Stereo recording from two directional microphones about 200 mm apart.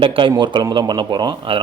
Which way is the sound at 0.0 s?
25° right (ahead or behind).